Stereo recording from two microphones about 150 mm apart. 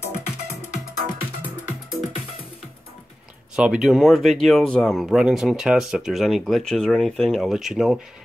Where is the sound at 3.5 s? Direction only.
5° right (ahead or behind).